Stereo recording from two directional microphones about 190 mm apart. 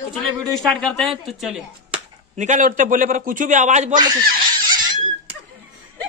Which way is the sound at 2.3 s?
40° right (ahead or behind).